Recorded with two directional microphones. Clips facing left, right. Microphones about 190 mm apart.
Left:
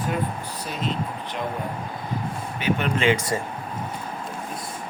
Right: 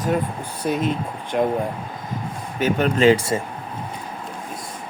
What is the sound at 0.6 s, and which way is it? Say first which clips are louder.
Speech: right 7 dB; 55° right (ahead or behind).